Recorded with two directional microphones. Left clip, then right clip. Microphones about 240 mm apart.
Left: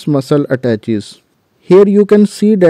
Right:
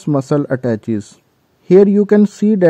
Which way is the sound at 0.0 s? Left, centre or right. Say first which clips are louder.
Left 3 dB; left.